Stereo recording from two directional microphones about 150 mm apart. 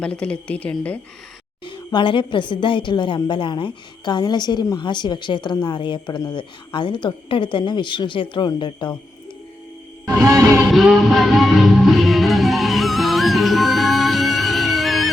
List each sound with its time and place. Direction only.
0.0 s a woman's voice: 5° left (ahead or behind)
1.6 s a woman's voice: 30° left (ahead or behind)
10.2 s music: 20° right (ahead or behind)
10.7 s music: centre (ahead or behind)